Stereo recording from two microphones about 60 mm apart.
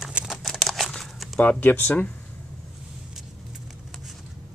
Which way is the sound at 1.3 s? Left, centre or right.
Left.